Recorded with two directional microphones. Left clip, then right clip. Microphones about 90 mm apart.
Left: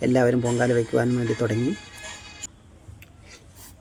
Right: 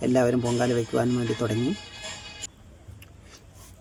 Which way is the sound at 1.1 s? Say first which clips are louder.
Left 2 dB; 35° right (ahead or behind).